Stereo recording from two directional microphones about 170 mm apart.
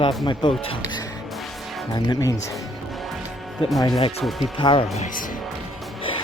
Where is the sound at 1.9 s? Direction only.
25° left (ahead or behind).